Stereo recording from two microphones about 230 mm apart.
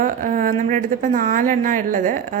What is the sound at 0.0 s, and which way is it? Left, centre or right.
A woman's voice, right.